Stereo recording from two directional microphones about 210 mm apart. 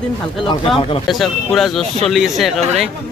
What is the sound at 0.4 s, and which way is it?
Speech, 25° left (ahead or behind).